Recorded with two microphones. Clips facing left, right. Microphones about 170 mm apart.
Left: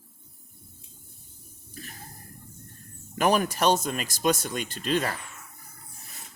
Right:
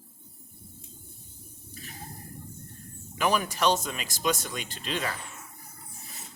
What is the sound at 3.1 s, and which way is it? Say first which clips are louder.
Speech: left 3 dB; 50° left (ahead or behind).